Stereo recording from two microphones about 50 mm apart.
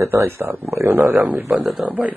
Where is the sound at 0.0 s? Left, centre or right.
Right.